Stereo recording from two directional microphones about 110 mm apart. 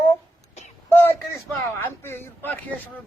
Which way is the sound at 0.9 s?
20° left (ahead or behind).